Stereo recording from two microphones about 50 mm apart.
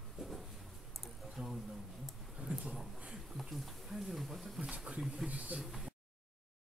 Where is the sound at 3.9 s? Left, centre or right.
Centre.